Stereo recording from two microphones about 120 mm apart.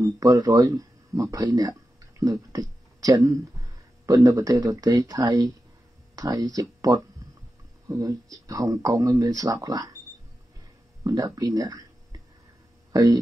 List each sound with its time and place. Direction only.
0.0 s speech: 30° right (ahead or behind)
11.1 s speech: 30° right (ahead or behind)
12.9 s speech: 30° right (ahead or behind)